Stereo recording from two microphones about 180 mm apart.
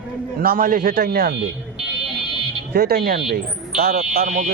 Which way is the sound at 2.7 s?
60° right (ahead or behind).